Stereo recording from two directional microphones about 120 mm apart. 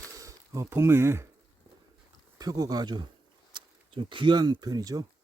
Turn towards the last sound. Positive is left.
turn(degrees=-30)  # may be behind; listen again after turning